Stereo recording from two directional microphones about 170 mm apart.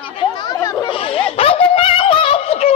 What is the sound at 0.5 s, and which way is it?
Children playing, 20° left (ahead or behind).